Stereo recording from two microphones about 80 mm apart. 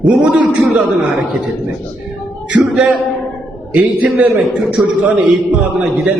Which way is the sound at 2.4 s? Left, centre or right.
Centre.